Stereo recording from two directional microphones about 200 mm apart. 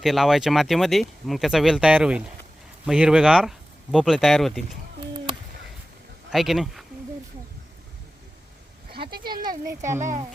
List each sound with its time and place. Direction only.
0.0 s speech: centre (ahead or behind)
6.3 s speech: centre (ahead or behind)
9.0 s a sound: 50° right (ahead or behind)
9.2 s speech: 20° right (ahead or behind)
10.0 s speech: 40° right (ahead or behind)